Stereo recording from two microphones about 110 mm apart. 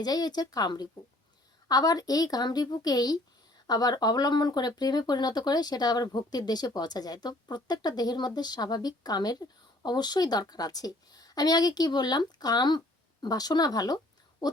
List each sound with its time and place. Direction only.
0.0 s speech: 35° left (ahead or behind)